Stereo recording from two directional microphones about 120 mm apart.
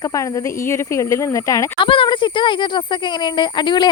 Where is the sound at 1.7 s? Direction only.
45° left (ahead or behind).